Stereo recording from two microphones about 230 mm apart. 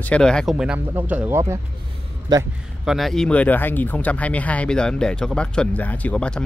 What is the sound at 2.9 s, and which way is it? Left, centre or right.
Speech, centre.